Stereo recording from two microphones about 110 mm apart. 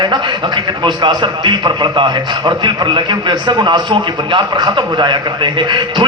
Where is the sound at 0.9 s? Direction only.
45° right (ahead or behind).